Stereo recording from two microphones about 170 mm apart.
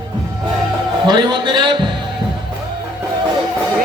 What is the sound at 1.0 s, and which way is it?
Speech, 25° right (ahead or behind).